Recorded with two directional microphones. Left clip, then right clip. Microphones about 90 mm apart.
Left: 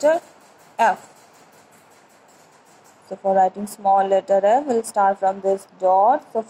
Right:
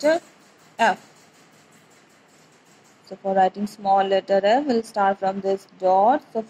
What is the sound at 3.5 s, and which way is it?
Speech, 35° left (ahead or behind).